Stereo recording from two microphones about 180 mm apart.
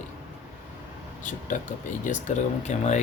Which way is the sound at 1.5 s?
45° left (ahead or behind).